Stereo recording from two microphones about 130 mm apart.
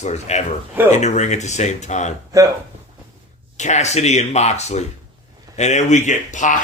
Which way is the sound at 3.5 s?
65° left (ahead or behind).